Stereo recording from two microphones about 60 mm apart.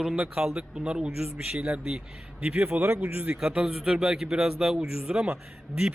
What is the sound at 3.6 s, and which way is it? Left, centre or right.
A man's voice, centre.